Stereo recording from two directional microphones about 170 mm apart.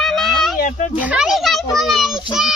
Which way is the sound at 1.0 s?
5° right (ahead or behind).